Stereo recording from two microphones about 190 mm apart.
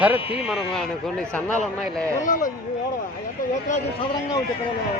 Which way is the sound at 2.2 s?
45° left (ahead or behind).